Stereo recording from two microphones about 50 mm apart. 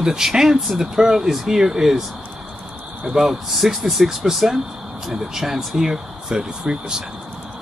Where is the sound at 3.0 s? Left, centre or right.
Centre.